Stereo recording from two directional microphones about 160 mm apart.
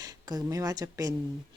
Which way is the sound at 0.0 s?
25° right (ahead or behind).